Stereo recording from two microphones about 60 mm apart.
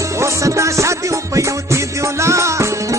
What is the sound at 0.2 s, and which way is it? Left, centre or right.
Music, right.